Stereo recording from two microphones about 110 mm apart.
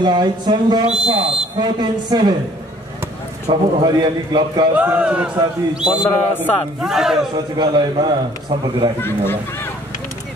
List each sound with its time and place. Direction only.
0.0 s speech: 40° right (ahead or behind)
1.0 s speech: 55° right (ahead or behind)
1.6 s speech: 40° right (ahead or behind)
3.5 s a man's voice: 45° right (ahead or behind)
4.7 s speech: 15° right (ahead or behind)
6.0 s a man's voice: 15° left (ahead or behind)
6.8 s speech: 5° right (ahead or behind)
7.3 s a man's voice: 40° right (ahead or behind)
9.0 s speech: 20° left (ahead or behind)